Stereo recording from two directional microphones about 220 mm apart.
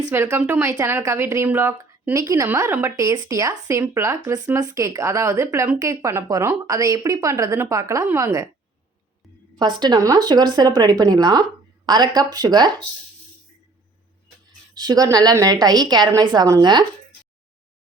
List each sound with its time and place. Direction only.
0.1 s speech: 10° right (ahead or behind)
9.6 s a woman's voice: 20° right (ahead or behind)
14.8 s a woman's voice: 15° right (ahead or behind)